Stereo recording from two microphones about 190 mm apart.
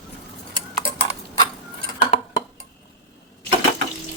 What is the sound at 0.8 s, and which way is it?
Typing, 30° right (ahead or behind).